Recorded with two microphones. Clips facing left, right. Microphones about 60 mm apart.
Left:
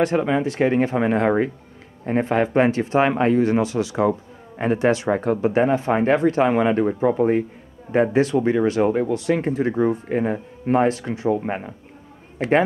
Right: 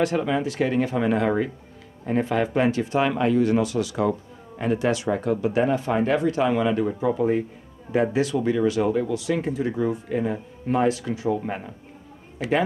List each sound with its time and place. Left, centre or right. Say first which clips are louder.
0.0 s speech: left 3 dB; left